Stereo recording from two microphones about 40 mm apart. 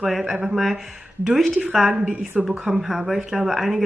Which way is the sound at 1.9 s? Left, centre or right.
Right.